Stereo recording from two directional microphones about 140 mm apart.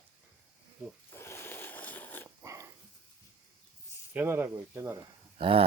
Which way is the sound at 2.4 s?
20° right (ahead or behind).